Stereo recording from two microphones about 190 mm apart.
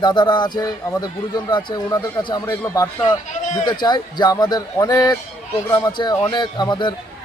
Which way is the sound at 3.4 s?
40° left (ahead or behind).